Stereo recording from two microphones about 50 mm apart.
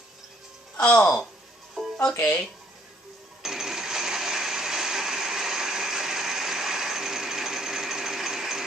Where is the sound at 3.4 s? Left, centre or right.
Centre.